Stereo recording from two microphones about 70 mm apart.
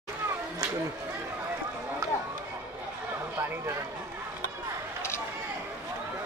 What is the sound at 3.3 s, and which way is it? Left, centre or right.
Speech, right.